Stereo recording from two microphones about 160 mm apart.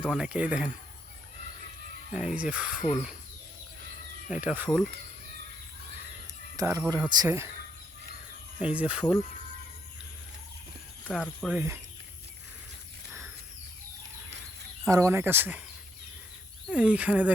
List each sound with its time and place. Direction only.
0.0 s speech: 10° right (ahead or behind)
2.1 s speech: 5° right (ahead or behind)
4.3 s speech: 10° right (ahead or behind)
6.6 s speech: 20° right (ahead or behind)
8.5 s speech: 10° right (ahead or behind)
11.2 s speech: centre (ahead or behind)
14.8 s speech: 20° right (ahead or behind)
16.7 s speech: 5° right (ahead or behind)